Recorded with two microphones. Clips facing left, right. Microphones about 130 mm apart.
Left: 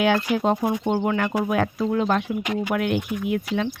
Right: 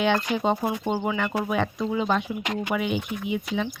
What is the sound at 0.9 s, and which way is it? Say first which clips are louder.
Speech: left 3 dB; 5° right (ahead or behind).